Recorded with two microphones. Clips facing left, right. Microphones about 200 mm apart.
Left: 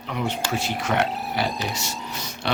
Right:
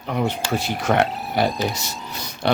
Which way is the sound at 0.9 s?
55° right (ahead or behind).